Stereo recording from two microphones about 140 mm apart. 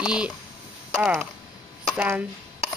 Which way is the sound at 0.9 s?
Centre (ahead or behind).